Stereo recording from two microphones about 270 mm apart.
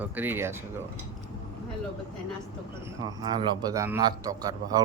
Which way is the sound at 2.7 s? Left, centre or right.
Centre.